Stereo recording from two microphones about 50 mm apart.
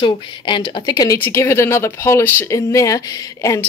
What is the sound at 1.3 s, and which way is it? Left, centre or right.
Speech, left.